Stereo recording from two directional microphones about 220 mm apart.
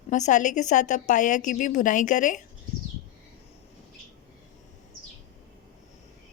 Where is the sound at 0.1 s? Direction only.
35° left (ahead or behind).